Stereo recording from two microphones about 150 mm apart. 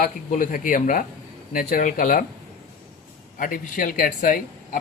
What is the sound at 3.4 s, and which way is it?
Speech, 65° left (ahead or behind).